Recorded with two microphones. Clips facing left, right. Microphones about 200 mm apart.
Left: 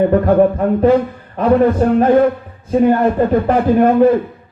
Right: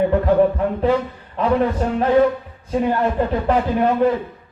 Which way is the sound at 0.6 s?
55° left (ahead or behind).